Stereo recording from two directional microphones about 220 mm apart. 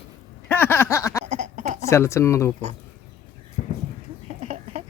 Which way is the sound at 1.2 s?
30° right (ahead or behind).